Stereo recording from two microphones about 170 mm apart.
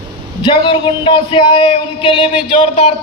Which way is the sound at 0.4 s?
25° left (ahead or behind).